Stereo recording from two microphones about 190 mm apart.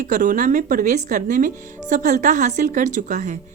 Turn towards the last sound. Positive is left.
turn(degrees=-40)  # may be behind; listen again after turning